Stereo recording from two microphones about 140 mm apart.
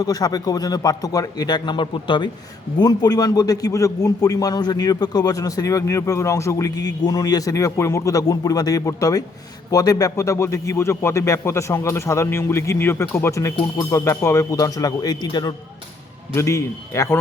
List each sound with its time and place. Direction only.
0.0 s a man's voice: 25° left (ahead or behind)
16.3 s a man's voice: 20° left (ahead or behind)